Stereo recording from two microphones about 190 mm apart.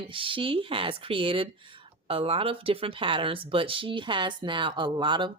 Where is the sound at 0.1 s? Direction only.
25° right (ahead or behind).